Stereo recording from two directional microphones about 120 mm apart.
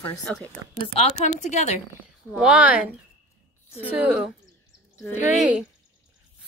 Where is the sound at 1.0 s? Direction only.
70° left (ahead or behind).